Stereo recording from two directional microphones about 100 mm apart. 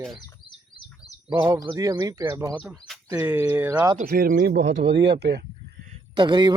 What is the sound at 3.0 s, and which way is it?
Speech, 20° right (ahead or behind).